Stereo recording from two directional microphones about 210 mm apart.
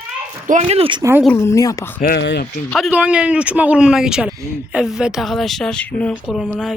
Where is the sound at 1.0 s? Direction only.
10° right (ahead or behind).